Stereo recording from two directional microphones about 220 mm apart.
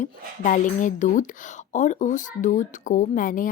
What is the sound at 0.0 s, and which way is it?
Speech, 35° left (ahead or behind).